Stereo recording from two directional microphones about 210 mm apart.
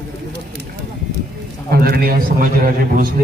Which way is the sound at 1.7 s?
45° right (ahead or behind).